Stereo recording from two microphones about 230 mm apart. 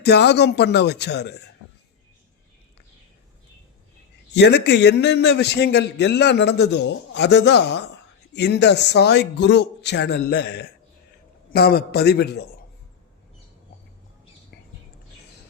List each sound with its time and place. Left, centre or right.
0.0 s a man's voice: left
4.3 s a man's voice: left